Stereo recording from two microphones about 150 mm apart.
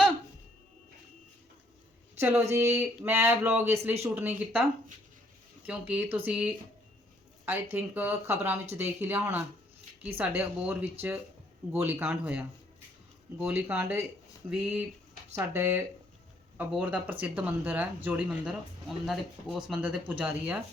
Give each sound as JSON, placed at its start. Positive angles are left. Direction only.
{"t": 2.1, "sound": "speech", "side_deg": -15}
{"t": 5.6, "sound": "speech", "side_deg": -10}